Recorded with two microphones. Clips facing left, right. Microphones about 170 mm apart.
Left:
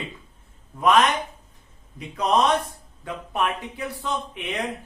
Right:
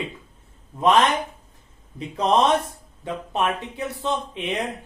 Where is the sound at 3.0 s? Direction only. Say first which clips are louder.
Right 2 dB; 25° right (ahead or behind).